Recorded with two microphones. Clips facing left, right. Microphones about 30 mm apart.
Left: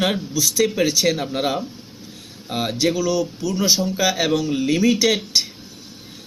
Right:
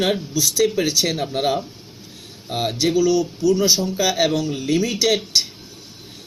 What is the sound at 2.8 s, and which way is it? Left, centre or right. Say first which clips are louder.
Speech: right 3 dB; left.